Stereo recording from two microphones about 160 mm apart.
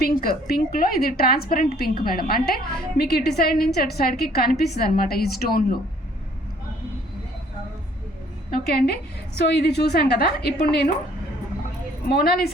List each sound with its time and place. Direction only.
0.0 s a woman's voice: 65° left (ahead or behind)
3.0 s a woman's voice: 80° left
8.4 s a woman's voice: 80° left
12.0 s a woman's voice: 75° left (ahead or behind)